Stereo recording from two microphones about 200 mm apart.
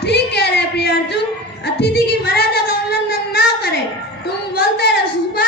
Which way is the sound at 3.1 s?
50° left (ahead or behind).